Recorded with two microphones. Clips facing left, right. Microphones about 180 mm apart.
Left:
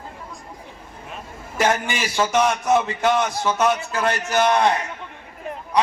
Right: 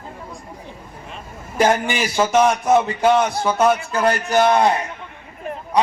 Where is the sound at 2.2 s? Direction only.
20° right (ahead or behind).